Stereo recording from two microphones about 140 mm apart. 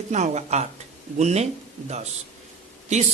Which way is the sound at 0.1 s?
55° right (ahead or behind).